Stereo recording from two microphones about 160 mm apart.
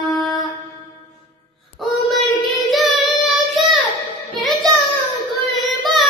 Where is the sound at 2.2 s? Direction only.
Centre (ahead or behind).